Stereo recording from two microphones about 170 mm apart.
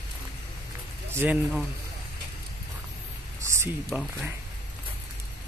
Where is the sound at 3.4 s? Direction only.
15° right (ahead or behind).